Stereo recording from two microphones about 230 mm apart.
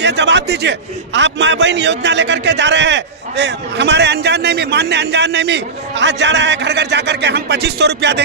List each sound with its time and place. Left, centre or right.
0.0 s a man's voice: right